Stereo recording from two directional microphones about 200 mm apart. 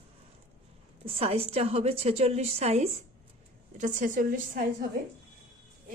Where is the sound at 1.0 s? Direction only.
30° right (ahead or behind); by 4.9 s 45° right (ahead or behind).